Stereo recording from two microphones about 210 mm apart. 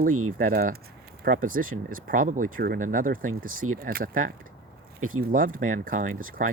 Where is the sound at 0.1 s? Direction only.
90° right.